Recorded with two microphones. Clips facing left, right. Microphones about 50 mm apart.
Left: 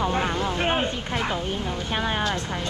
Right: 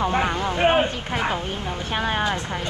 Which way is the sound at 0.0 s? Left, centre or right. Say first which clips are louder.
Right 2 dB; centre.